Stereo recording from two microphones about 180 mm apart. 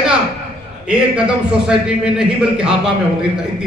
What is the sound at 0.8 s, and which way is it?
A man's voice, 5° right (ahead or behind).